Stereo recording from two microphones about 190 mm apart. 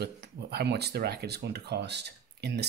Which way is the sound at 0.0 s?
60° right (ahead or behind).